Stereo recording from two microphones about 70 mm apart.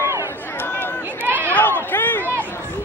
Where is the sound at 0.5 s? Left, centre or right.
Left.